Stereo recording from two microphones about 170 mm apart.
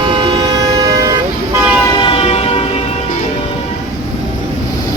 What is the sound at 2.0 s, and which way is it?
Vehicle, 30° left (ahead or behind).